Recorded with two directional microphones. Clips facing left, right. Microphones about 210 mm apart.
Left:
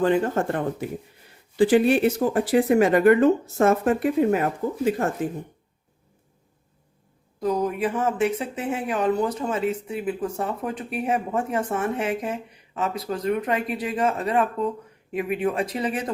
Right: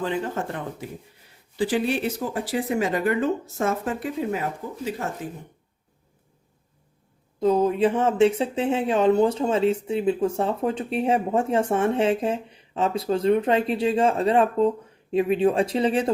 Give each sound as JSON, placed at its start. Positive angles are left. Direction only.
{"t": 0.0, "sound": "speech", "side_deg": 50}
{"t": 7.3, "sound": "speech", "side_deg": -25}